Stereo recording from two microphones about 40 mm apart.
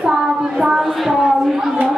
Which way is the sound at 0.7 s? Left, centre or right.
Centre.